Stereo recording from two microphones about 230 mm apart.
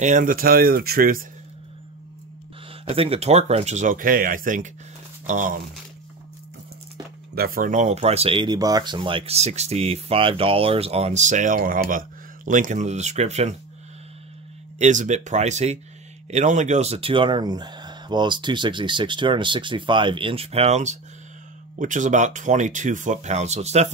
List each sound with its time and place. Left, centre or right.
0.0 s speech: right
2.8 s speech: right
7.3 s speech: right
14.8 s speech: right